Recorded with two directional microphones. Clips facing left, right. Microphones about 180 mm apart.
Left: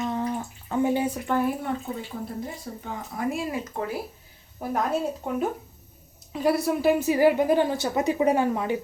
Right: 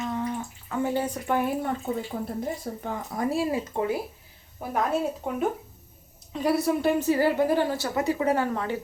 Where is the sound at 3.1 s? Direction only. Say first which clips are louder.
Right 3 dB; 35° right (ahead or behind).